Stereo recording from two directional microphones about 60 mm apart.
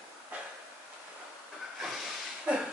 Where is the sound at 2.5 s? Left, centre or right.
Centre.